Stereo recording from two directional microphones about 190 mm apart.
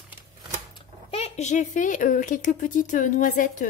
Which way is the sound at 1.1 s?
35° left (ahead or behind).